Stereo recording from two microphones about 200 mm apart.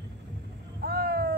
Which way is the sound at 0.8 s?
50° right (ahead or behind).